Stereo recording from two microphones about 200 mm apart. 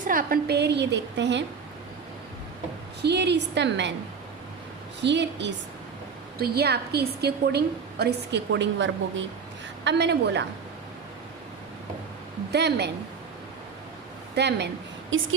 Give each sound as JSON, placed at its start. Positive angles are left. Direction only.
{"t": 0.1, "sound": "a woman's voice", "side_deg": -45}
{"t": 3.0, "sound": "a woman's voice", "side_deg": -60}
{"t": 5.0, "sound": "a woman's voice", "side_deg": -60}
{"t": 12.5, "sound": "a woman's voice", "side_deg": -55}
{"t": 14.3, "sound": "a woman's voice", "side_deg": -60}
{"t": 15.1, "sound": "speech", "side_deg": -75}